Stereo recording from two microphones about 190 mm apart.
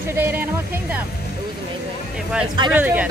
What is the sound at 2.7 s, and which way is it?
Speech, 10° right (ahead or behind).